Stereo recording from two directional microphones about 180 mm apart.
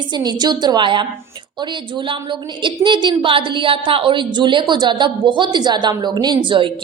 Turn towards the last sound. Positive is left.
turn(degrees=-25)  # may be behind; listen again after turning